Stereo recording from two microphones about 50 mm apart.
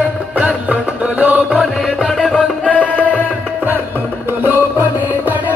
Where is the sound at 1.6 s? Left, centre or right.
Centre.